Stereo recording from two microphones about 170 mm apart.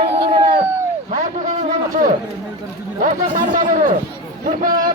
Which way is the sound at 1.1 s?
45° right (ahead or behind).